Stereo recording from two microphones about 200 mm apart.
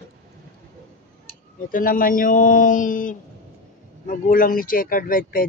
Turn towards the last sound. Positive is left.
turn(degrees=45)  # may be behind; listen again after turning